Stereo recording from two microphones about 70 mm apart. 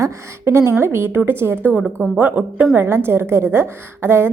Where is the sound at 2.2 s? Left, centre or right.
Right.